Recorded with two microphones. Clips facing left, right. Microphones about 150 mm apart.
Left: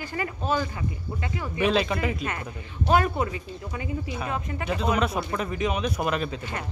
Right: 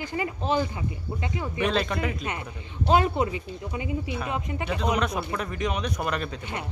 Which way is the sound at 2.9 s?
20° right (ahead or behind).